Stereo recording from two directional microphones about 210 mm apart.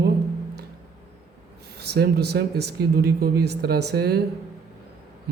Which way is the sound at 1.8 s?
50° right (ahead or behind).